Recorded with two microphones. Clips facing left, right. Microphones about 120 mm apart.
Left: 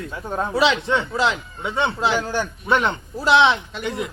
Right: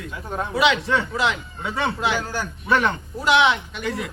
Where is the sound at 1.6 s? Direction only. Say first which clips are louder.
Left 3 dB; 20° left (ahead or behind).